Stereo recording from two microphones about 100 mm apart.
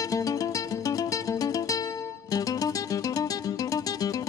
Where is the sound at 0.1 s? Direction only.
35° left (ahead or behind).